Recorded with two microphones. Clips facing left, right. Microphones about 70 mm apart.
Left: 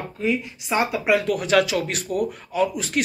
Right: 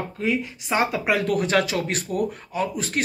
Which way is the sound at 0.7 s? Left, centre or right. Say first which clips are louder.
Left 2 dB; right.